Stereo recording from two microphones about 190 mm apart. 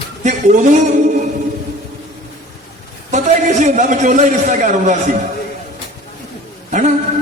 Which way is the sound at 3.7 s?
40° right (ahead or behind).